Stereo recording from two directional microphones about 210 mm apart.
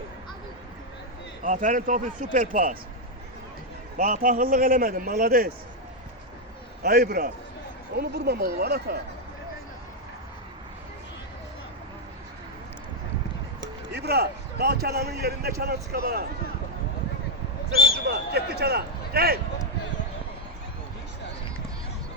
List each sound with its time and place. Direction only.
1.5 s a man's voice: 40° right (ahead or behind)
3.9 s a man's voice: 35° right (ahead or behind)
6.8 s speech: 45° right (ahead or behind)
13.6 s speech: 50° right (ahead or behind)
17.9 s speech: 50° right (ahead or behind)